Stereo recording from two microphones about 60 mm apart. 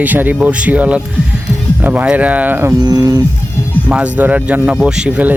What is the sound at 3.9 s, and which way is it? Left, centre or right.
Speech, right.